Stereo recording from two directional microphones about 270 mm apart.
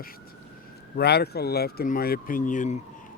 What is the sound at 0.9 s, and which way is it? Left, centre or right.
Speech, left.